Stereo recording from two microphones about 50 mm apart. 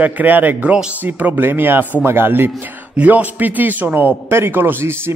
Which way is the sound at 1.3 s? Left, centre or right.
Right.